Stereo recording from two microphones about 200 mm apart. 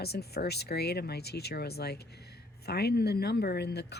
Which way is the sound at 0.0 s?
55° left (ahead or behind).